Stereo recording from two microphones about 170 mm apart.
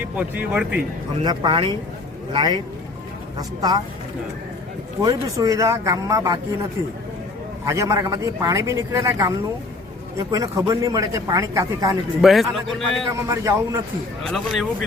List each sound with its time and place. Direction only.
0.2 s a man's voice: 5° right (ahead or behind)
1.2 s speech: 25° right (ahead or behind)
5.0 s speech: 20° right (ahead or behind)
7.6 s a man's voice: 15° right (ahead or behind)
12.2 s a man's voice: centre (ahead or behind)
13.1 s speech: 20° right (ahead or behind)
14.3 s a man's voice: centre (ahead or behind)